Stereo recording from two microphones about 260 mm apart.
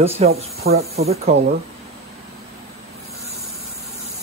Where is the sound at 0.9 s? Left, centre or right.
Right.